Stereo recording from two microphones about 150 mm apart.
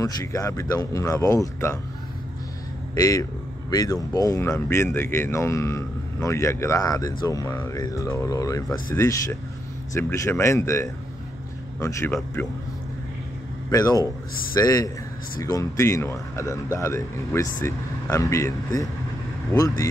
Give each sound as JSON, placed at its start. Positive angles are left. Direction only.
{"t": 0.0, "sound": "speech", "side_deg": 20}
{"t": 2.9, "sound": "a man's voice", "side_deg": 20}
{"t": 12.4, "sound": "speech", "side_deg": 15}
{"t": 13.7, "sound": "speech", "side_deg": 25}